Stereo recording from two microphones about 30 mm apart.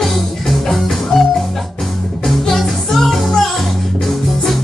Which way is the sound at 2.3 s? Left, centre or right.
Centre.